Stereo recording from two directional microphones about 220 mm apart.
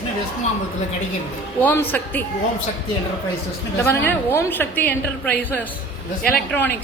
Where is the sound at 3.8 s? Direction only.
10° left (ahead or behind).